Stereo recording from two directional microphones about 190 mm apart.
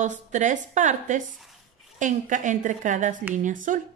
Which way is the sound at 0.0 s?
40° right (ahead or behind).